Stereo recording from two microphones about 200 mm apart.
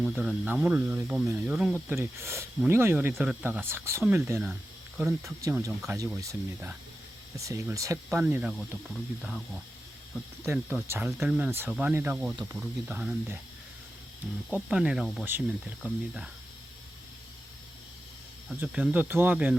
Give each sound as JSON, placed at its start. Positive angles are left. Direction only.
{"t": 0.0, "sound": "speech", "side_deg": -5}
{"t": 10.4, "sound": "speech", "side_deg": -10}
{"t": 14.5, "sound": "speech", "side_deg": -5}
{"t": 18.4, "sound": "speech", "side_deg": -5}